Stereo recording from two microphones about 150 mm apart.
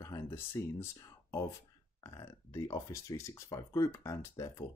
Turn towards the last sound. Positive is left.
turn(degrees=20)  # may be behind; listen again after turning